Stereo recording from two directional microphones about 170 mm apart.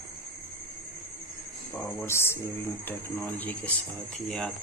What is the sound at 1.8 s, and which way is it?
Speech, 10° left (ahead or behind).